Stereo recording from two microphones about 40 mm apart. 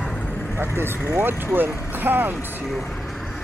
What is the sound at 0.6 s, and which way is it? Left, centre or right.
Speech, right.